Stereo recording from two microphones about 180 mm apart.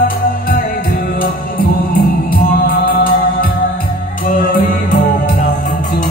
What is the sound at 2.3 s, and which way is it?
Music, 55° left (ahead or behind).